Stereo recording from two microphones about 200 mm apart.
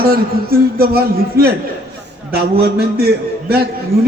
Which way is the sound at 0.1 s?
50° right (ahead or behind).